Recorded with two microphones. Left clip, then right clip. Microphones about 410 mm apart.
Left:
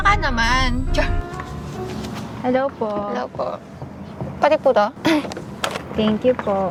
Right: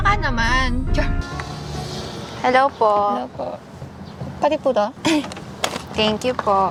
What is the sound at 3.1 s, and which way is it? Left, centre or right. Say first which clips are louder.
Speech: left 1 dB; left.